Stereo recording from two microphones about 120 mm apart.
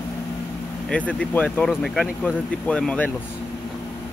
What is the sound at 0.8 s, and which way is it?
Speech, 10° left (ahead or behind).